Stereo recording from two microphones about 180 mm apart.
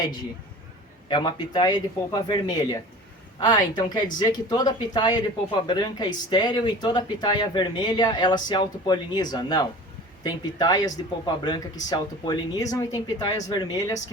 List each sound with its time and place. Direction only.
1.0 s speech: 25° left (ahead or behind)